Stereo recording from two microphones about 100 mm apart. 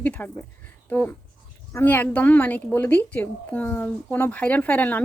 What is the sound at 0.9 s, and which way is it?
A woman's voice, 15° left (ahead or behind).